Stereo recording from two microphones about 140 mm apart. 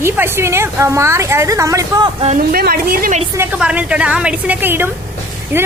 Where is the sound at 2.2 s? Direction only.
75° right (ahead or behind).